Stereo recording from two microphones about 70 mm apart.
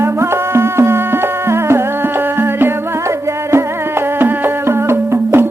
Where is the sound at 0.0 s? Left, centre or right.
Right.